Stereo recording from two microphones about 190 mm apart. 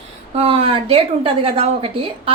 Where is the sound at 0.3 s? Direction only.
30° right (ahead or behind).